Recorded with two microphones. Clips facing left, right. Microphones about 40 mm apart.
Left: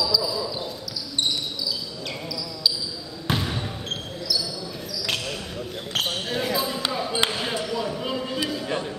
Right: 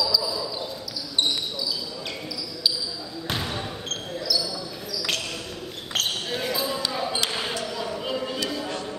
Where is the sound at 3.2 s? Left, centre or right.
Centre.